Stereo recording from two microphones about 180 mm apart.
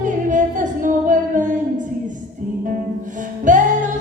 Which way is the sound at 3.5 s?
45° right (ahead or behind).